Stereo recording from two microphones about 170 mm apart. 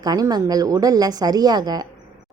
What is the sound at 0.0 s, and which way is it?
Speech, 20° right (ahead or behind).